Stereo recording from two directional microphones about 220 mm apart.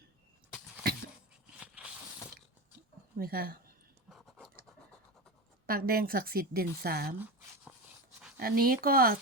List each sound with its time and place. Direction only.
1.5 s a sound: 5° right (ahead or behind)
3.2 s speech: 45° right (ahead or behind)
4.1 s scratch: centre (ahead or behind)
5.6 s speech: 40° right (ahead or behind)
8.4 s speech: 45° right (ahead or behind)